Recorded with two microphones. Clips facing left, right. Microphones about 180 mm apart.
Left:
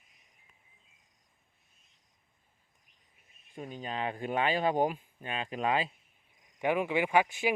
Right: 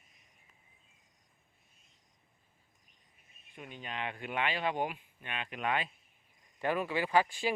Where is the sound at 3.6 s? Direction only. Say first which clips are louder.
Left 5 dB; 35° left (ahead or behind).